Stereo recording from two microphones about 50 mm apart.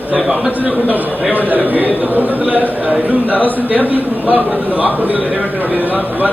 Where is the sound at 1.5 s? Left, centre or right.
Right.